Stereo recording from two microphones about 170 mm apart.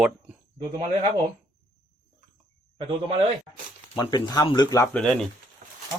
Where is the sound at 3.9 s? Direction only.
25° left (ahead or behind).